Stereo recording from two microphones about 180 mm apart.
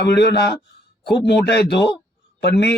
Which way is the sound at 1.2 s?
70° left (ahead or behind).